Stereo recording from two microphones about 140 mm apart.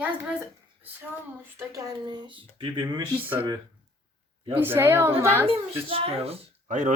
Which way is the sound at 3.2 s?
15° right (ahead or behind).